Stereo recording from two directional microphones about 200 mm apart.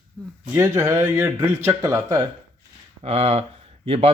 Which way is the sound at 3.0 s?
30° right (ahead or behind).